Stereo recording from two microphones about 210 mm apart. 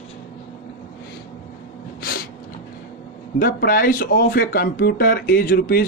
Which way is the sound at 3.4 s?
45° left (ahead or behind).